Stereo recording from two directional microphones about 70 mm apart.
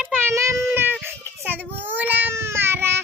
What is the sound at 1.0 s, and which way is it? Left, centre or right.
Baby cry, right.